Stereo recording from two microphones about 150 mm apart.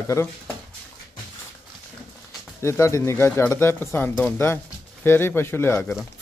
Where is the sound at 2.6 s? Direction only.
20° left (ahead or behind).